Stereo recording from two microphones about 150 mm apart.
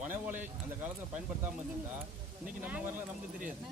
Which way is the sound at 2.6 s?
10° right (ahead or behind).